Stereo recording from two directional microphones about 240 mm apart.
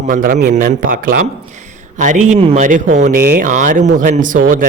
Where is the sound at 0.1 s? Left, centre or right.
Right.